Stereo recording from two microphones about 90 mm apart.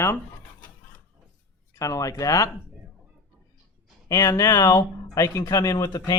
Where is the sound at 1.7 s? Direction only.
40° left (ahead or behind).